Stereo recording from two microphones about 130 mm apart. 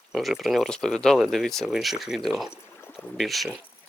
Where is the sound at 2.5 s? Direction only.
20° left (ahead or behind).